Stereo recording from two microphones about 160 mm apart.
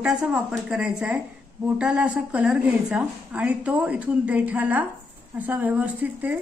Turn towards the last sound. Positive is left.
turn(degrees=-10)  # may be behind; listen again after turning